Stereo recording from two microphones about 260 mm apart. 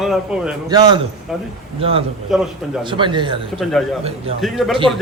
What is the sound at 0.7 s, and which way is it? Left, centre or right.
Speech, centre.